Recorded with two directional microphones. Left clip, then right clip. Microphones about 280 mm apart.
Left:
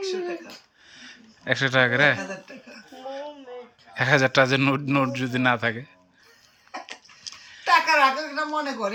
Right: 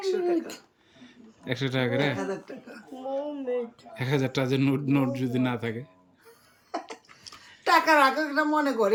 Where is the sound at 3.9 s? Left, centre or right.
Centre.